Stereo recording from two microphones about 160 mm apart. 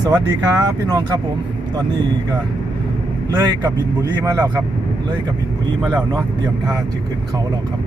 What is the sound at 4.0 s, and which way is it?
Speech, 20° right (ahead or behind).